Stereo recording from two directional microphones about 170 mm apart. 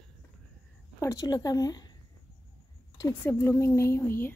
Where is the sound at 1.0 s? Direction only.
20° left (ahead or behind).